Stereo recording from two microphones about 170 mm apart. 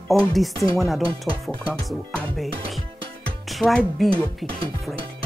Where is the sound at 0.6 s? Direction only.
15° left (ahead or behind).